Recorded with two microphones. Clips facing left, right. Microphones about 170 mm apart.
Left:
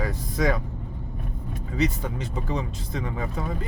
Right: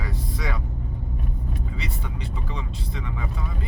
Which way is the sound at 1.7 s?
45° left (ahead or behind).